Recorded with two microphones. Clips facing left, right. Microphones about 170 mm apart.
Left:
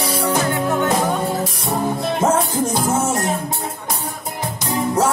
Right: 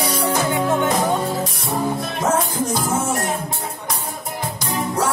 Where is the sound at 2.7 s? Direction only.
25° left (ahead or behind).